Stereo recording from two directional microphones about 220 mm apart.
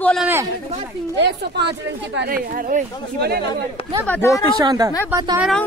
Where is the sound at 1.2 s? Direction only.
50° right (ahead or behind).